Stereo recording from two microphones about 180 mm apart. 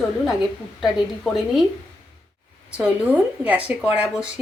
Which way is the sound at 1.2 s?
Centre (ahead or behind).